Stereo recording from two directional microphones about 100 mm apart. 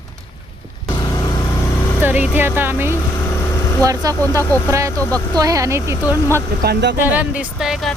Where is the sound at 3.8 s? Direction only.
35° right (ahead or behind).